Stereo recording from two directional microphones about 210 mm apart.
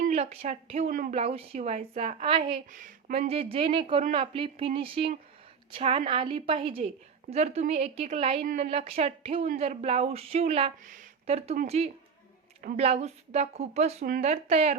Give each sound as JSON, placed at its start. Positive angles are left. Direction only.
{"t": 0.0, "sound": "speech", "side_deg": -30}
{"t": 1.1, "sound": "a woman's voice", "side_deg": -30}